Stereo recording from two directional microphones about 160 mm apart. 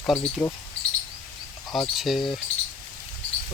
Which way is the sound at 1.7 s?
Centre (ahead or behind).